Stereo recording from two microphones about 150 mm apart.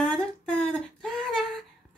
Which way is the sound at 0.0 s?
5° left (ahead or behind).